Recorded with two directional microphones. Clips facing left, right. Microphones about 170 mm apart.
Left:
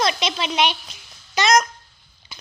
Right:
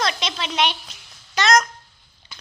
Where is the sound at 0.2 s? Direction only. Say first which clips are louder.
Left 2 dB; 10° left (ahead or behind).